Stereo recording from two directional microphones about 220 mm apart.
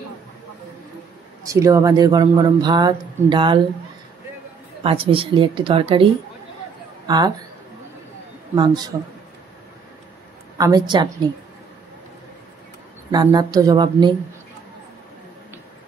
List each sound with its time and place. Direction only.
1.4 s speech: 15° right (ahead or behind)
4.8 s speech: 25° right (ahead or behind)
7.1 s speech: 20° right (ahead or behind)
8.5 s speech: 20° right (ahead or behind)
10.6 s speech: 20° right (ahead or behind)
13.1 s speech: 20° right (ahead or behind)